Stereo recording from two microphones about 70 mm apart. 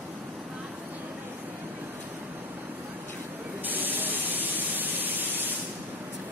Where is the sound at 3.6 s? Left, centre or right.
Right.